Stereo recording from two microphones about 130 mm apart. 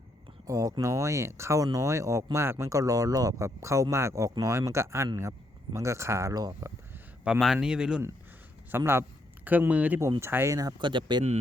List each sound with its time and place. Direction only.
0.4 s speech: 25° right (ahead or behind)
7.3 s speech: 5° right (ahead or behind)
8.7 s speech: 20° right (ahead or behind); by 11.2 s 35° right (ahead or behind)